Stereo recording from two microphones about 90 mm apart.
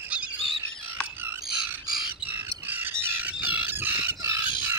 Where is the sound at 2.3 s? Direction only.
20° right (ahead or behind).